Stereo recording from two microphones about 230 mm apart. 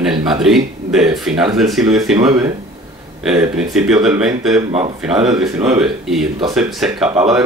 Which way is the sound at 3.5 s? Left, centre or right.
Centre.